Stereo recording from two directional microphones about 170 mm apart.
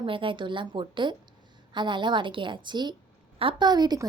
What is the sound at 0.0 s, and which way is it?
A woman's voice, 30° right (ahead or behind).